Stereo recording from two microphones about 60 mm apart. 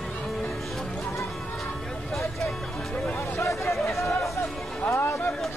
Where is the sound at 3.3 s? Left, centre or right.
Left.